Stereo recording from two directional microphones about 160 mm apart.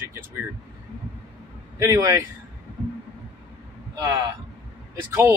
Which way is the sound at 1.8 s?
20° right (ahead or behind).